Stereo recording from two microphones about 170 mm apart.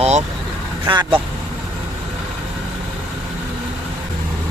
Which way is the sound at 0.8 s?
30° right (ahead or behind).